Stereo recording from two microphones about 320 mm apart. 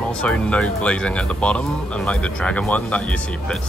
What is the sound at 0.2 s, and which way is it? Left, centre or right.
Speech, centre.